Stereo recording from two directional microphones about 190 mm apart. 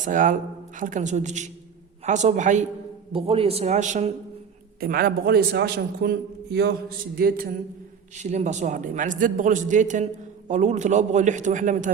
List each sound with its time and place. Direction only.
0.0 s a man's voice: 45° right (ahead or behind)
3.1 s a man's voice: 30° right (ahead or behind)
4.8 s a man's voice: 50° right (ahead or behind)
7.2 s a man's voice: 50° right (ahead or behind)
8.1 s a man's voice: 35° right (ahead or behind)